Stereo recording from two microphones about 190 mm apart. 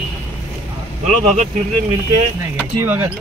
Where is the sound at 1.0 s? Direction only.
40° right (ahead or behind).